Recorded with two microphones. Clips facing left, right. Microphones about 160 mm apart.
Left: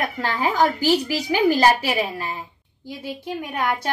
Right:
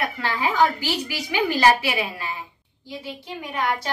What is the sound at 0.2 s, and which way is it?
A woman's voice, 40° left (ahead or behind).